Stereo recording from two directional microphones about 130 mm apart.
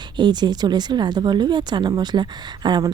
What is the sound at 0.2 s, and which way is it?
Speech, 35° right (ahead or behind).